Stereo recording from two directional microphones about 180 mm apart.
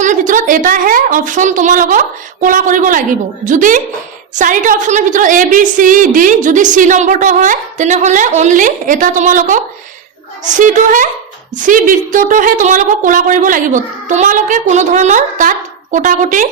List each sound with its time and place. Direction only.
0.0 s a woman's voice: 45° right (ahead or behind)
10.6 s a woman's voice: 45° right (ahead or behind)